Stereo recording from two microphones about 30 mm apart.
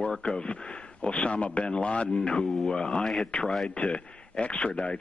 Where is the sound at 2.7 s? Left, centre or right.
Left.